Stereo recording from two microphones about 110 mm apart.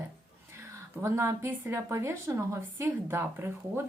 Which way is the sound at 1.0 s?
25° right (ahead or behind).